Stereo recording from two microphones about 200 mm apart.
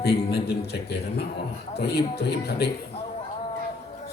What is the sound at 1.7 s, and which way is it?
Speech, 55° left (ahead or behind).